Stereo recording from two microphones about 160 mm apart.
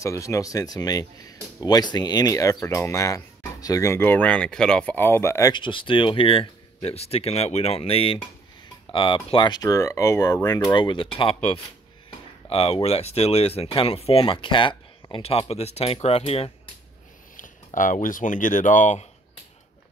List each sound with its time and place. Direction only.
0.0 s speech: 20° left (ahead or behind); by 16.5 s 40° left (ahead or behind)
17.7 s speech: 55° left (ahead or behind)